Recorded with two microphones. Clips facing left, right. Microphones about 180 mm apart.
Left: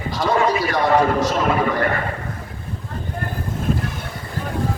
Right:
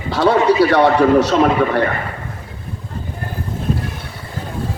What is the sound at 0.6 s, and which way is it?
A man's voice, 70° right (ahead or behind).